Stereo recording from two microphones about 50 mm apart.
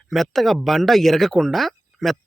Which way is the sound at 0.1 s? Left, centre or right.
Centre.